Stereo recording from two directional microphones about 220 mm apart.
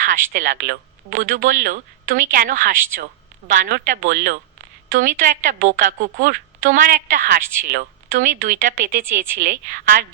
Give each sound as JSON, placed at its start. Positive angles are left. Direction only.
{"t": 0.0, "sound": "speech", "side_deg": -35}